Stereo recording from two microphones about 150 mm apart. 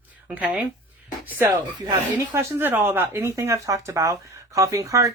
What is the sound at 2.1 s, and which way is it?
Speech, 15° right (ahead or behind).